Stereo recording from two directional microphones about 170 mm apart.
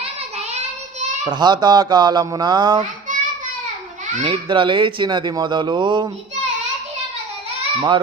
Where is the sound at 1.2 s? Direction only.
25° right (ahead or behind).